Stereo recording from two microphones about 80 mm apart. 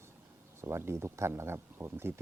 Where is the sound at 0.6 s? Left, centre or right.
Right.